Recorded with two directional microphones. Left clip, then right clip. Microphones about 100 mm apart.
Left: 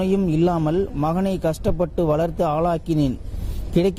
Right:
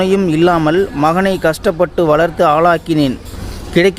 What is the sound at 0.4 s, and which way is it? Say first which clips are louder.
Speech: right 11 dB; 25° right (ahead or behind).